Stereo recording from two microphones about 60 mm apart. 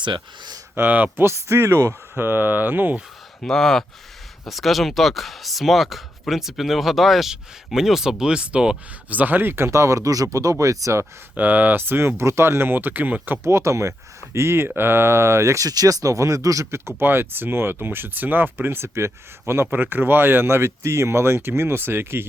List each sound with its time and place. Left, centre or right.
0.8 s speech: right
1.1 s speech: right
1.9 s speech: right
3.4 s speech: centre
9.0 s speech: right
9.6 s speech: right
11.3 s speech: right
13.4 s speech: right
14.3 s speech: right
17.0 s speech: right
19.7 s speech: right